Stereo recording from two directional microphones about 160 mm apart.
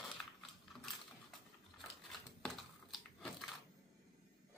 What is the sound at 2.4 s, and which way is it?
Crushing, centre (ahead or behind).